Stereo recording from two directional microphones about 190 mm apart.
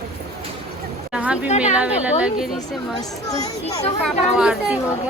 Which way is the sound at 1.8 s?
5° right (ahead or behind).